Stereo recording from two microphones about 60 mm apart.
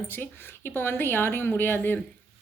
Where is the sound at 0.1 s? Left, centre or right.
Left.